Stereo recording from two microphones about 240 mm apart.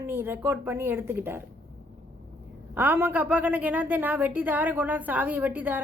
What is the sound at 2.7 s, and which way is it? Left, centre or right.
A woman's voice, centre.